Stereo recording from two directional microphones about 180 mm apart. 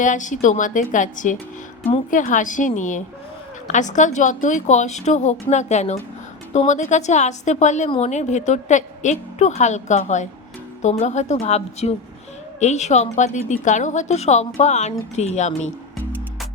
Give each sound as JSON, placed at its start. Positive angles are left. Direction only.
{"t": 0.0, "sound": "a woman's voice", "side_deg": 45}